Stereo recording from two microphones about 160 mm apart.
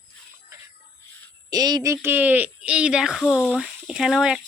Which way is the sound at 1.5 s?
25° right (ahead or behind).